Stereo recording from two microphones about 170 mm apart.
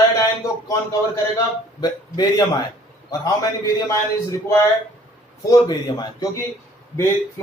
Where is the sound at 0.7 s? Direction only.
20° left (ahead or behind).